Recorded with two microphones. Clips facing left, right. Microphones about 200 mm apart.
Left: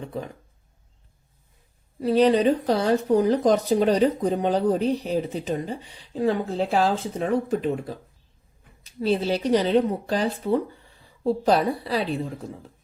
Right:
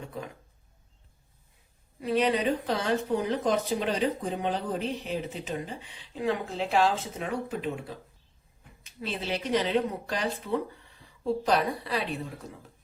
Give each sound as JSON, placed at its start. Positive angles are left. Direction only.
{"t": 2.0, "sound": "speech", "side_deg": 35}